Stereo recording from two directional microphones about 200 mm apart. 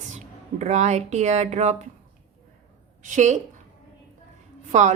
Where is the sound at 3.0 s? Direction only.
40° right (ahead or behind).